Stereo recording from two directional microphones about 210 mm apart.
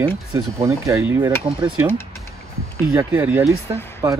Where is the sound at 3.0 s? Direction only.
10° right (ahead or behind).